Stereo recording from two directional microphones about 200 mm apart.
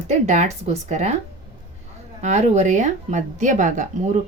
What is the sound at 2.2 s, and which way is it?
Speech, 35° right (ahead or behind).